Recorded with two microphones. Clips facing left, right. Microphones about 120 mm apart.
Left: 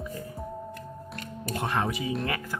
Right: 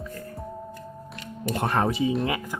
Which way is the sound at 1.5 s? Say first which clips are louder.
Right 4 dB; 50° right (ahead or behind).